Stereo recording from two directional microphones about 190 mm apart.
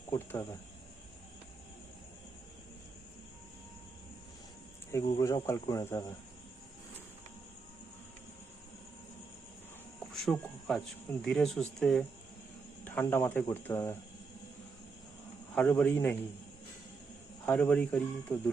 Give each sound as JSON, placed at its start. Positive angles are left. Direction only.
{"t": 0.1, "sound": "cricket", "side_deg": 10}
{"t": 4.9, "sound": "speech", "side_deg": 15}
{"t": 10.1, "sound": "speech", "side_deg": 0}
{"t": 15.5, "sound": "speech", "side_deg": 5}
{"t": 17.4, "sound": "speech", "side_deg": 5}